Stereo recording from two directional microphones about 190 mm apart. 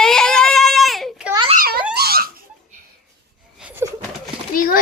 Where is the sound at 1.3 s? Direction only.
25° right (ahead or behind).